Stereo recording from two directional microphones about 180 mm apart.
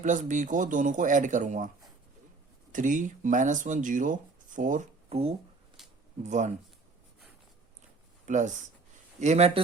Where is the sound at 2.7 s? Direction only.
45° right (ahead or behind).